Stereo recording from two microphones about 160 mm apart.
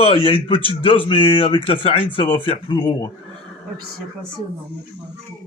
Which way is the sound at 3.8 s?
70° right (ahead or behind).